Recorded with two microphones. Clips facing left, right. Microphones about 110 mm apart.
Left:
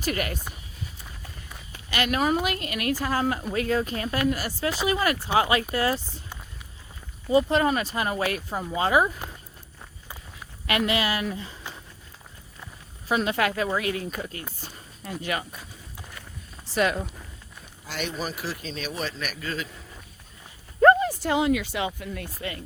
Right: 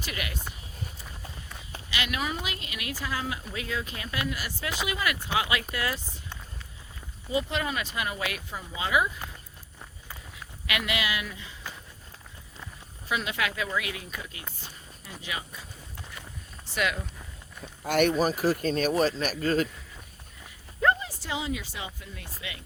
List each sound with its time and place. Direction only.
0.0 s a woman's voice: 45° left (ahead or behind)
1.9 s a woman's voice: 45° left (ahead or behind)
7.3 s speech: 40° left (ahead or behind)
10.7 s speech: 35° left (ahead or behind)
13.1 s a woman's voice: 40° left (ahead or behind)
15.0 s speech: 55° left (ahead or behind)
16.7 s speech: 40° left (ahead or behind)
17.8 s speech: 55° right (ahead or behind)
20.8 s speech: 55° left (ahead or behind)